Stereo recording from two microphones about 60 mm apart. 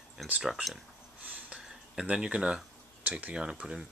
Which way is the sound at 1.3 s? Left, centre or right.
Right.